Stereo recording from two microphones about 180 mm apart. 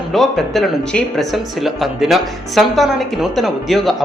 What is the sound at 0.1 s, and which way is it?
Speech, centre (ahead or behind).